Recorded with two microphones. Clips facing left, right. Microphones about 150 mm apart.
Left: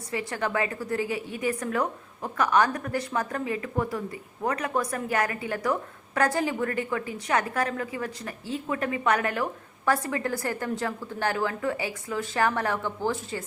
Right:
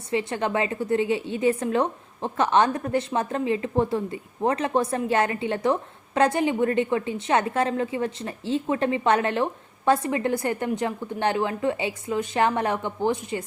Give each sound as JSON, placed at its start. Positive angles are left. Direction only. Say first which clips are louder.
{"t": 0.1, "sound": "a woman's voice", "louder": "right 4 dB", "side_deg": -25}